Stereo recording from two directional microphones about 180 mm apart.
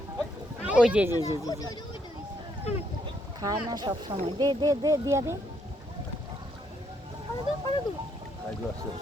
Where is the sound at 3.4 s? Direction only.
20° right (ahead or behind).